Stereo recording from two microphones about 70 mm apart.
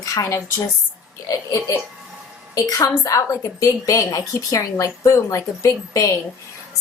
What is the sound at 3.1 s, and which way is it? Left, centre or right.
A woman's voice, left.